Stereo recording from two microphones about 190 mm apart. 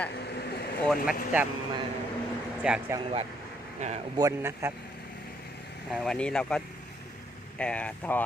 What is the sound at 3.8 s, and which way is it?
Speech, 40° right (ahead or behind).